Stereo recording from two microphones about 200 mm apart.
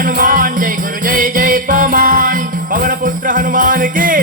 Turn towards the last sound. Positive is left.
turn(degrees=-40)  # may be behind; listen again after turning